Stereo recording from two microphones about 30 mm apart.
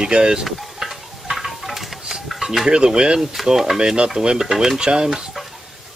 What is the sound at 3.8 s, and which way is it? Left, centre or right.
Speech, right.